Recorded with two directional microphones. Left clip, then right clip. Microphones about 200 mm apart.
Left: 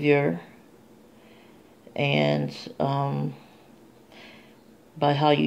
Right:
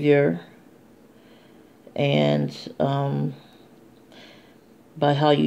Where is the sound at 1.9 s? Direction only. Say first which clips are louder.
Right 2 dB; centre (ahead or behind).